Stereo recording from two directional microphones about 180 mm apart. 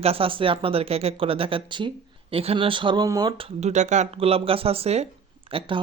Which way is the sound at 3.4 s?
40° right (ahead or behind).